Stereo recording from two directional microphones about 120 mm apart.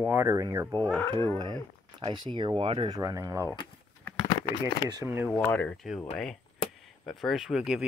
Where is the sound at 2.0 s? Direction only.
40° right (ahead or behind).